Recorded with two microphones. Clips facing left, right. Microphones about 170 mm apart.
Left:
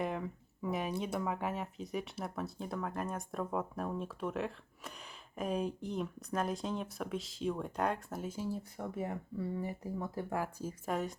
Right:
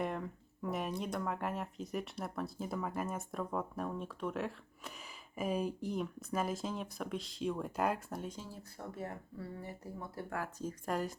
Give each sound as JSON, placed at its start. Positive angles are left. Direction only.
{"t": 0.0, "sound": "speech", "side_deg": 0}
{"t": 8.4, "sound": "speech", "side_deg": 15}